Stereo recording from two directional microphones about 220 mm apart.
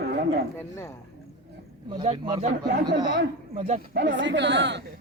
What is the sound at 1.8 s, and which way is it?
Speech, 25° right (ahead or behind).